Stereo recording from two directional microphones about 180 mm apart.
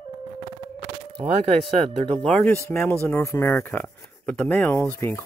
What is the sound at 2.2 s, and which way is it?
Speech, 5° left (ahead or behind).